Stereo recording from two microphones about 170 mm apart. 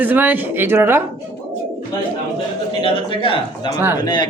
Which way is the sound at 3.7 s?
10° right (ahead or behind).